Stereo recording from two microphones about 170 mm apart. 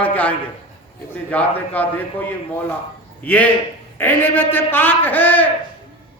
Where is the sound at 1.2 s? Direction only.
10° left (ahead or behind).